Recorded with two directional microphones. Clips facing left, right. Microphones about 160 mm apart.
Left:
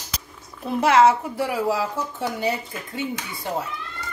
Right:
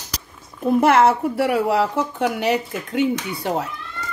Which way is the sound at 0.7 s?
55° right (ahead or behind).